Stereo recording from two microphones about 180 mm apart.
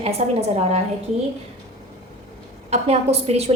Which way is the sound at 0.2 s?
40° right (ahead or behind).